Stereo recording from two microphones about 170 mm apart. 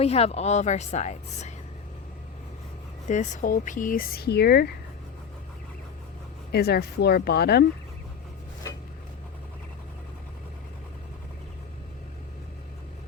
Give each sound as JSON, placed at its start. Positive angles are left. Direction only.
{"t": 0.0, "sound": "a woman's voice", "side_deg": 35}
{"t": 3.1, "sound": "speech", "side_deg": 45}
{"t": 6.5, "sound": "speech", "side_deg": 70}